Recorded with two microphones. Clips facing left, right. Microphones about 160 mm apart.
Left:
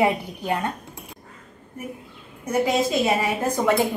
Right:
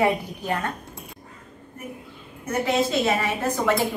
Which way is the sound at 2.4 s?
10° left (ahead or behind).